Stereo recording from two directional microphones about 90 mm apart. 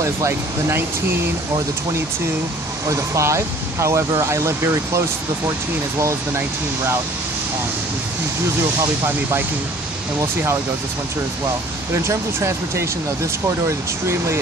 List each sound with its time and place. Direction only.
0.0 s speech: 30° right (ahead or behind)
2.9 s speech: 35° right (ahead or behind)
11.9 s speech: 30° right (ahead or behind)